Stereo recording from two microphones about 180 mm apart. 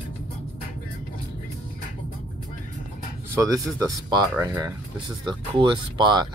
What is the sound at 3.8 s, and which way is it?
Speech, 20° right (ahead or behind).